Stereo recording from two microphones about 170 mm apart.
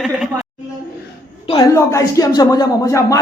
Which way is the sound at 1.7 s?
20° left (ahead or behind).